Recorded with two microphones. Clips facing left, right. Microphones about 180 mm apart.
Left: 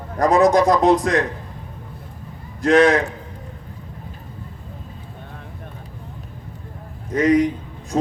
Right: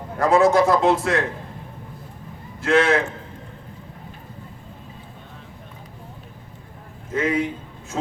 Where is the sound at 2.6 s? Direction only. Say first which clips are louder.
Left 4 dB; 35° left (ahead or behind).